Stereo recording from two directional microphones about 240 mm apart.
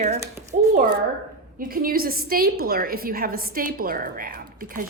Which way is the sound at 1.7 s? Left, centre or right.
Right.